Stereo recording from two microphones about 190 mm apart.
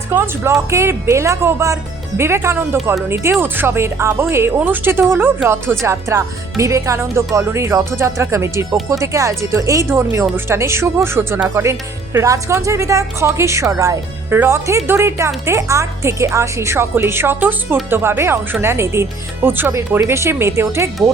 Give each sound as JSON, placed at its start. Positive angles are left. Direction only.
{"t": 0.1, "sound": "speech", "side_deg": -15}